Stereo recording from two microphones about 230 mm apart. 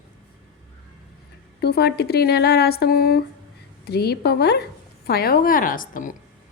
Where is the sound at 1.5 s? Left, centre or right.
Left.